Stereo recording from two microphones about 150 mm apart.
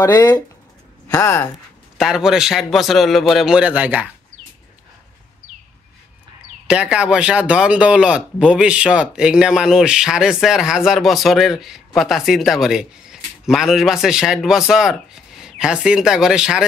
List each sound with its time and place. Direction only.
0.0 s speech: 25° left (ahead or behind)
2.0 s speech: 5° right (ahead or behind)
6.7 s speech: 5° right (ahead or behind)